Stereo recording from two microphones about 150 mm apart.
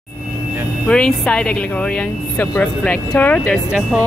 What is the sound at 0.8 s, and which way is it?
Speech, 5° left (ahead or behind).